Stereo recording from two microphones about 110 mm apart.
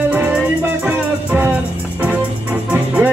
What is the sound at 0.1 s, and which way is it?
Music, 15° right (ahead or behind).